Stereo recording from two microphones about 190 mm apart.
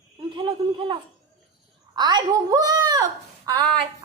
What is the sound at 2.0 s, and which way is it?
A woman's voice, 20° right (ahead or behind).